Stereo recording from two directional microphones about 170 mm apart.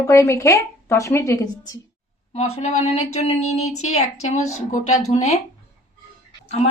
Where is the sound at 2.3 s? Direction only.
40° left (ahead or behind).